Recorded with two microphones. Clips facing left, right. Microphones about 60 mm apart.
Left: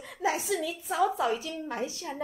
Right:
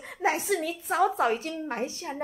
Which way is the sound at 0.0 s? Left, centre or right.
Right.